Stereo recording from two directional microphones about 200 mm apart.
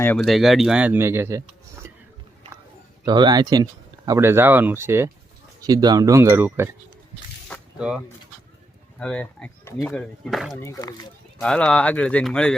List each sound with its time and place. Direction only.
0.0 s speech: 5° left (ahead or behind); by 1.4 s 15° right (ahead or behind)
3.0 s speech: 20° right (ahead or behind)
7.5 s a sound: 5° right (ahead or behind)
9.0 s speech: 5° left (ahead or behind)
10.6 s speech: 15° left (ahead or behind)
11.3 s speech: 5° left (ahead or behind)